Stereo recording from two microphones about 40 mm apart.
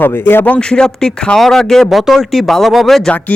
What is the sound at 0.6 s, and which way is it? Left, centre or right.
Speech, left.